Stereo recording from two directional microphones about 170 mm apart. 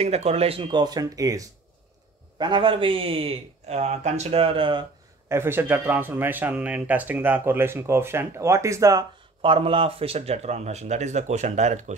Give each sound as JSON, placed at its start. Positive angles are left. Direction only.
{"t": 0.0, "sound": "a man's voice", "side_deg": -40}
{"t": 5.3, "sound": "speech", "side_deg": -15}
{"t": 9.4, "sound": "a man's voice", "side_deg": -30}